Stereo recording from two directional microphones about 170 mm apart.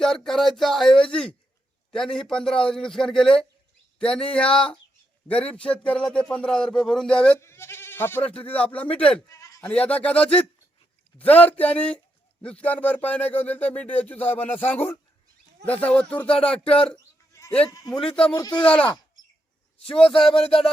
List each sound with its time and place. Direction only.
0.0 s speech: 5° left (ahead or behind)
9.3 s bleat: 20° left (ahead or behind)
9.6 s speech: 5° left (ahead or behind)
16.6 s music: 35° left (ahead or behind)
17.3 s sheep: 15° left (ahead or behind)
17.7 s speech: 20° left (ahead or behind)
18.6 s speech: 5° left (ahead or behind)
20.1 s music: 35° left (ahead or behind)